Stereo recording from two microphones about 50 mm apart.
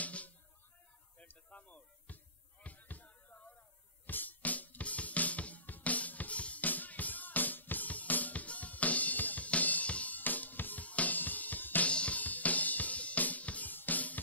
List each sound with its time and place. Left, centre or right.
0.0 s music: left
1.1 s a sound: left
2.6 s music: left
11.9 s drum kit: left